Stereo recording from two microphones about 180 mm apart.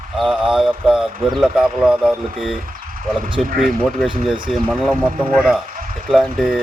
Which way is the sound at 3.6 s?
Centre (ahead or behind).